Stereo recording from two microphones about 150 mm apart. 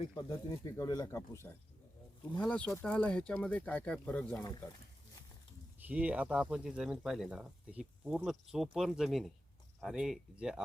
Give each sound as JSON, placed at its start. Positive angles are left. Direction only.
{"t": 0.1, "sound": "speech", "side_deg": 30}
{"t": 2.4, "sound": "speech", "side_deg": 5}
{"t": 5.8, "sound": "speech", "side_deg": -10}